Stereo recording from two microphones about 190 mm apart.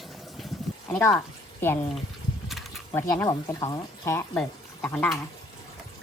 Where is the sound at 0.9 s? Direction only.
5° left (ahead or behind).